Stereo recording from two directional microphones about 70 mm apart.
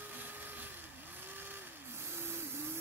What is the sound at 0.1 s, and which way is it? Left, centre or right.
Vehicle, right.